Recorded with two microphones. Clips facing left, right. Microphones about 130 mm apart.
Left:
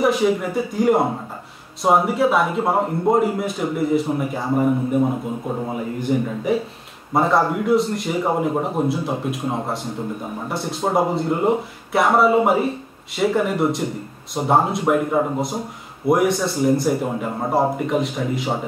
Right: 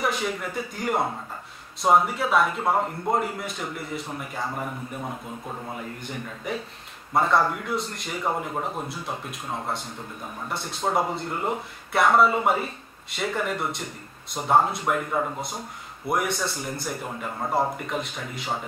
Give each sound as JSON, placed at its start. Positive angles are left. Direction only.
{"t": 0.0, "sound": "a man's voice", "side_deg": 5}
{"t": 5.7, "sound": "a man's voice", "side_deg": 5}
{"t": 17.4, "sound": "speech", "side_deg": 25}
{"t": 17.8, "sound": "a man's voice", "side_deg": 5}